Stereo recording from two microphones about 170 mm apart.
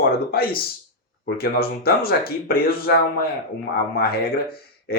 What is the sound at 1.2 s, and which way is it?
Speech, 65° left (ahead or behind).